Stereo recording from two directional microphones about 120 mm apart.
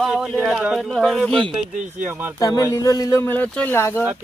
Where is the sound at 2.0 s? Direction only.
15° right (ahead or behind).